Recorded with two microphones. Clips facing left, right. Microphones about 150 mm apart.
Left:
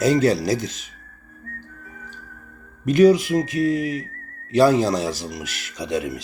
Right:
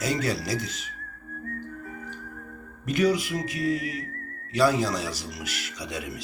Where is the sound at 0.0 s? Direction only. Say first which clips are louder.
Left 10 dB; 25° left (ahead or behind).